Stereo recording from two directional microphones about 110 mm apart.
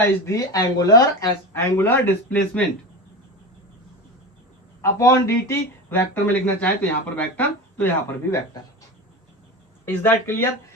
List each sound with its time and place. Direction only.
0.0 s speech: 30° left (ahead or behind)
4.8 s speech: 25° left (ahead or behind)
9.8 s speech: 20° left (ahead or behind)